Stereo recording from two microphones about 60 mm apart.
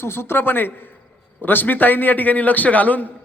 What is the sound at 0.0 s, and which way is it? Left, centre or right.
A man's voice, left.